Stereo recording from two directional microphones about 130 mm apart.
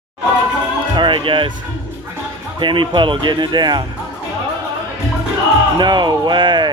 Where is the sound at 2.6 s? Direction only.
40° right (ahead or behind).